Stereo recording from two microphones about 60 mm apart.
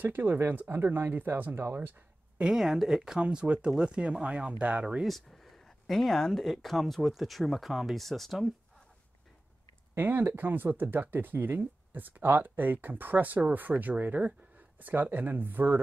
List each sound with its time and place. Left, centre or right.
0.0 s speech: right
2.4 s speech: centre
5.0 s speech: centre
9.9 s speech: right